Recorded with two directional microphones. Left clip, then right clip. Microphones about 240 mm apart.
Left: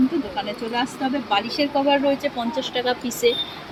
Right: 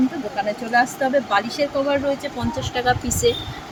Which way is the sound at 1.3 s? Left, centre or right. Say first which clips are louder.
Right 1 dB; centre.